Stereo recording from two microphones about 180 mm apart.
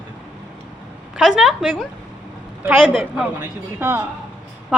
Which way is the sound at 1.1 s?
5° right (ahead or behind).